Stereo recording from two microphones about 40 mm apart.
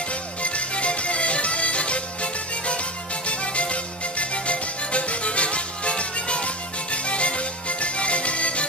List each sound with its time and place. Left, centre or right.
0.4 s music: left
3.3 s music: left